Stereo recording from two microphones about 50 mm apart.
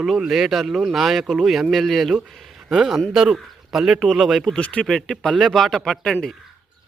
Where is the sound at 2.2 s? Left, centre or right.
Centre.